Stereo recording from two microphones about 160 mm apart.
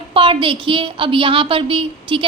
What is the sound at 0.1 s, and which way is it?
A woman's voice, 35° right (ahead or behind).